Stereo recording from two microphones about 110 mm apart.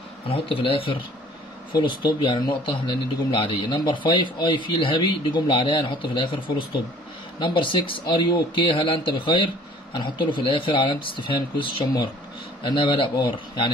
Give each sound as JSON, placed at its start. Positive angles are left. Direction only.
{"t": 0.3, "sound": "a man's voice", "side_deg": 55}